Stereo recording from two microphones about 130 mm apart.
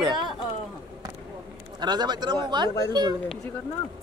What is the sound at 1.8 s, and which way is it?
Speech, 35° right (ahead or behind).